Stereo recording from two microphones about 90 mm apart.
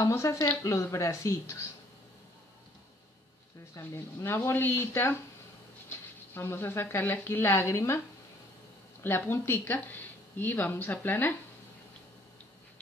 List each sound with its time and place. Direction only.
0.0 s speech: 35° left (ahead or behind)
3.7 s speech: 30° left (ahead or behind)
5.9 s a sound: 25° left (ahead or behind)
7.0 s speech: 20° left (ahead or behind)
9.0 s speech: 25° left (ahead or behind)